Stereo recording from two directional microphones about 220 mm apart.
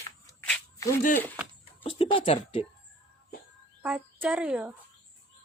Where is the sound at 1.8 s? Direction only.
25° left (ahead or behind).